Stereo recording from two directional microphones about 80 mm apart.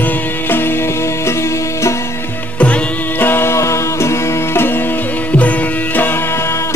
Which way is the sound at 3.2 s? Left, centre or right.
Left.